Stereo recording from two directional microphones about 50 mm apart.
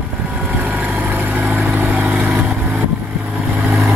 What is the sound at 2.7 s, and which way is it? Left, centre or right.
Vehicle, right.